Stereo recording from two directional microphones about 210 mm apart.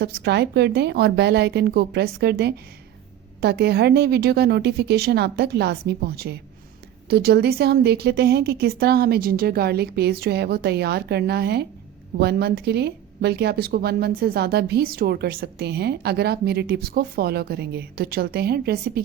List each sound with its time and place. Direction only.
0.0 s a woman's voice: 50° right (ahead or behind)